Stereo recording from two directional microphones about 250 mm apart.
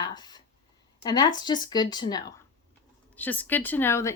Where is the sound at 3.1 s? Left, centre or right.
Centre.